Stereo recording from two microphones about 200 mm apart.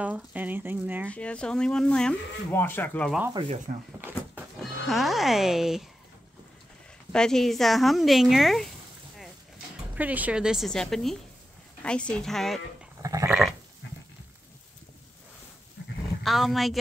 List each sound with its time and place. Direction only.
0.0 s speech: 10° right (ahead or behind)
1.0 s speech: 5° left (ahead or behind)
3.3 s speech: 30° right (ahead or behind)
4.0 s neigh: 5° right (ahead or behind)
7.1 s speech: 5° left (ahead or behind)
9.9 s speech: 10° right (ahead or behind)
13.0 s goat: 15° right (ahead or behind)
13.3 s goat: centre (ahead or behind)
16.2 s speech: centre (ahead or behind)